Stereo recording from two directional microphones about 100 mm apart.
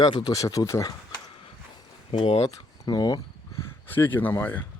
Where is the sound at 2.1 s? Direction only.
85° left.